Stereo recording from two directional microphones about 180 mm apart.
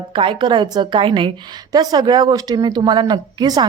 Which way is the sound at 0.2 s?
25° right (ahead or behind).